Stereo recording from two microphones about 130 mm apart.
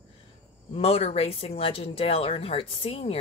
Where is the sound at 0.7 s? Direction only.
50° left (ahead or behind).